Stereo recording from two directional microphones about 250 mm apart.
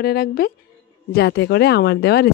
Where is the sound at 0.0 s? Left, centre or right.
Left.